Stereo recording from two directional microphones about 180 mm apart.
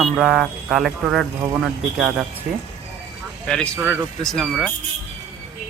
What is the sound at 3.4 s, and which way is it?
Speech, 5° left (ahead or behind).